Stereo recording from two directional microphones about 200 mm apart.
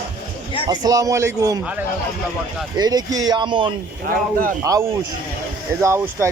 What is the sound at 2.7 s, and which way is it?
Speech, 20° right (ahead or behind).